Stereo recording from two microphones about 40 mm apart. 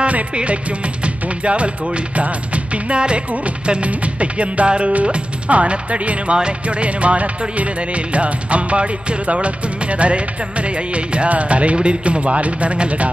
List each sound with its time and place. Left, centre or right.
0.0 s music: right